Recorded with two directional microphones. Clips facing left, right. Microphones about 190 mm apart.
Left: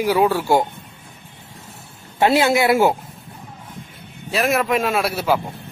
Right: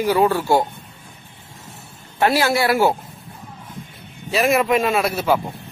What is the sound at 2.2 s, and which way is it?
Speech, 20° left (ahead or behind).